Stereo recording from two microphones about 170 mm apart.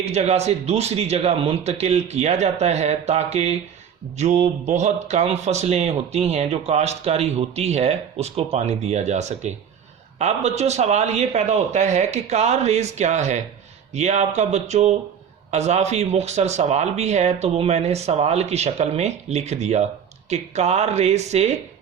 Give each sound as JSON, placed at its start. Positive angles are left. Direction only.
{"t": 0.0, "sound": "speech", "side_deg": -40}